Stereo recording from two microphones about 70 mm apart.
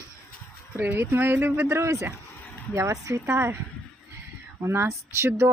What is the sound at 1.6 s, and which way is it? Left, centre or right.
A woman's voice, right.